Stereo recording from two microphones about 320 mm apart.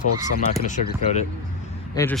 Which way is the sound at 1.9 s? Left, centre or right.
Centre.